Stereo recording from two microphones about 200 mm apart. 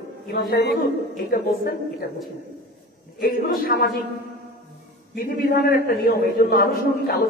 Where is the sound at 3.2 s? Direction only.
45° left (ahead or behind).